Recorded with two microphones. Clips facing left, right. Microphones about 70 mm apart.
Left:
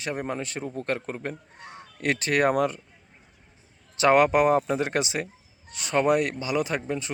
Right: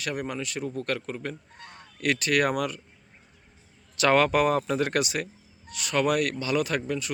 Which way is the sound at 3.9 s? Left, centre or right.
Left.